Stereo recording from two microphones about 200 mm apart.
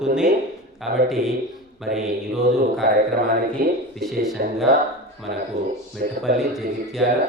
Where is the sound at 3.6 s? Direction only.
45° right (ahead or behind).